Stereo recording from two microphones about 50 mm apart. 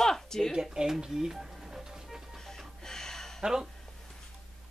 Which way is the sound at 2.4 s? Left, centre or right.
Centre.